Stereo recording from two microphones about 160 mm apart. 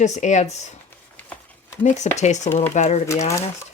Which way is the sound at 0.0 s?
45° left (ahead or behind).